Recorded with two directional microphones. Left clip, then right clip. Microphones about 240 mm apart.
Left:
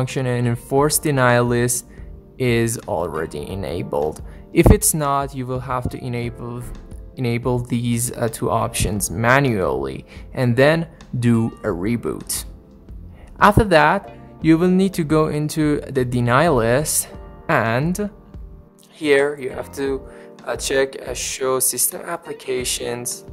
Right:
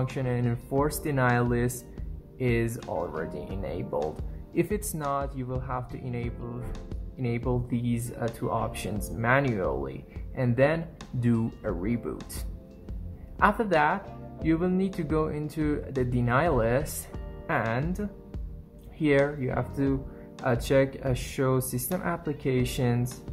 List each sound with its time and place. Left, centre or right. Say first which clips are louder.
0.0 s speech: left 8 dB; left
13.4 s speech: left 10 dB; left